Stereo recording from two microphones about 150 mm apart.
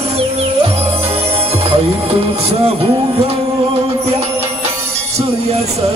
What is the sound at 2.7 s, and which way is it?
Speech, 40° right (ahead or behind).